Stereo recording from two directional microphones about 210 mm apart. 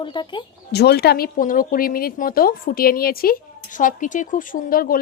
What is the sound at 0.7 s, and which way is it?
Speech, 50° left (ahead or behind).